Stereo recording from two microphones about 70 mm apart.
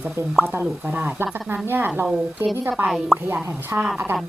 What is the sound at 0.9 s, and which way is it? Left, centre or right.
Speech, right.